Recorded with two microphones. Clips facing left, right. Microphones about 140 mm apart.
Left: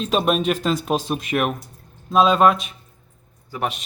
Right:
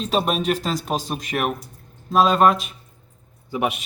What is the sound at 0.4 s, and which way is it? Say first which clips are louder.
Speech: left 2 dB; 40° right (ahead or behind).